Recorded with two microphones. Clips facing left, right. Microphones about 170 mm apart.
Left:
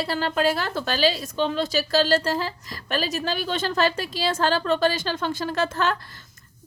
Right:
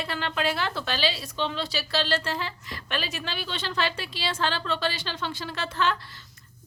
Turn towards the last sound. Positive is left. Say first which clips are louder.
# left 4 dB
turn(degrees=45)  # may be behind; listen again after turning